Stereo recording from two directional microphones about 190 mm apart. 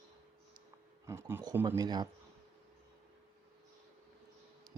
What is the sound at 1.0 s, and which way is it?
Speech, 10° right (ahead or behind).